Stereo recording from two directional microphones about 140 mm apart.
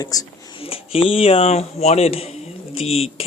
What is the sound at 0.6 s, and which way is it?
Speech, 45° left (ahead or behind).